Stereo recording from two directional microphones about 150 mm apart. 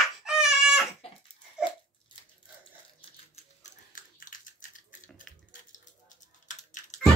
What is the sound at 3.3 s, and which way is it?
Typing, 55° left (ahead or behind).